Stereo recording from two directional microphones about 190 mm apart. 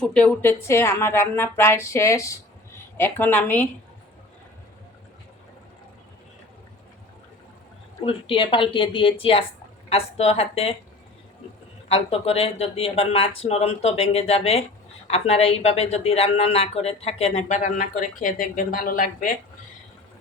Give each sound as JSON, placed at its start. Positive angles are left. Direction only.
{"t": 0.0, "sound": "a woman's voice", "side_deg": 5}
{"t": 8.0, "sound": "a woman's voice", "side_deg": 25}
{"t": 11.9, "sound": "speech", "side_deg": 30}